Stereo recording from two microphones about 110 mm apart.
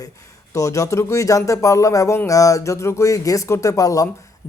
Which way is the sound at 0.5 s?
30° left (ahead or behind).